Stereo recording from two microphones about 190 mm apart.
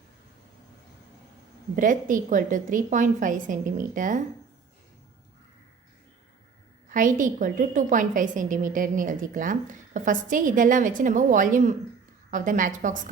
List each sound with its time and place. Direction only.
1.7 s a woman's voice: 45° right (ahead or behind)
6.9 s a woman's voice: 45° right (ahead or behind)